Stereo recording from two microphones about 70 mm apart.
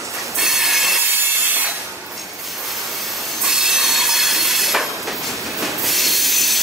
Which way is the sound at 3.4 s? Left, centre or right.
Centre.